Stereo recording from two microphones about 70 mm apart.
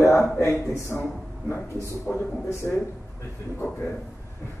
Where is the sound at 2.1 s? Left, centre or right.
Left.